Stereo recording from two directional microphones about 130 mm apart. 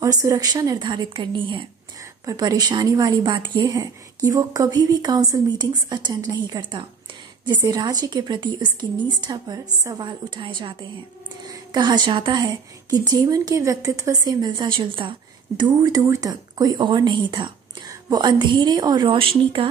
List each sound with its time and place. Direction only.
0.0 s a woman's voice: 25° right (ahead or behind); by 19.7 s 40° right (ahead or behind)